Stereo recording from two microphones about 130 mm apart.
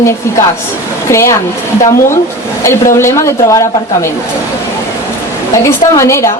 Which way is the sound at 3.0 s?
20° left (ahead or behind).